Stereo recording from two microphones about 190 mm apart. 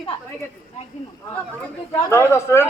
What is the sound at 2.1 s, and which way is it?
Speech, 15° left (ahead or behind).